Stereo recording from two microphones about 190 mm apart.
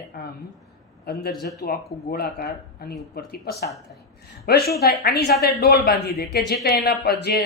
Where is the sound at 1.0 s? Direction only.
55° left (ahead or behind).